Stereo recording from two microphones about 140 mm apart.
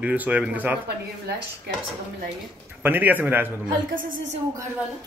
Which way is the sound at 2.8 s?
15° right (ahead or behind).